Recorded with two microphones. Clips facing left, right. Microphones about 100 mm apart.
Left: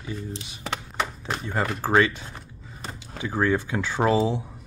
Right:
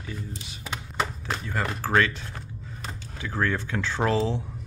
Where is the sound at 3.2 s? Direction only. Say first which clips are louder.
Left 4 dB; 15° left (ahead or behind).